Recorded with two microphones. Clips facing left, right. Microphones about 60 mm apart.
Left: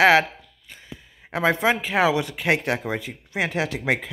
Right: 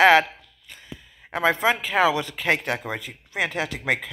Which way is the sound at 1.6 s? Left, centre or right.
Left.